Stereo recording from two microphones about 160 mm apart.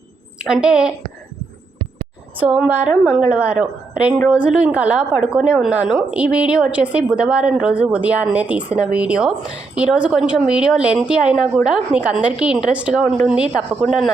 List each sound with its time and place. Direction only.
0.4 s a woman's voice: 5° right (ahead or behind)
2.4 s a woman's voice: 10° right (ahead or behind)